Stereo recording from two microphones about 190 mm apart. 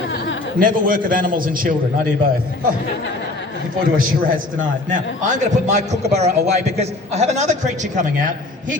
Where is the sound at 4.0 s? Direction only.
45° right (ahead or behind).